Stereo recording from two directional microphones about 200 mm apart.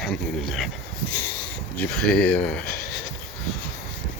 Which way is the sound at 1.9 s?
5° left (ahead or behind).